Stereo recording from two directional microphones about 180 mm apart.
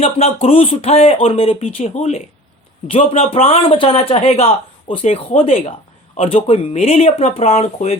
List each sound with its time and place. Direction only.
0.0 s a man's voice: 35° left (ahead or behind)